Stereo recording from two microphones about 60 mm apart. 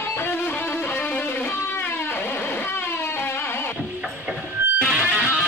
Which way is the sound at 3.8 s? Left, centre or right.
Right.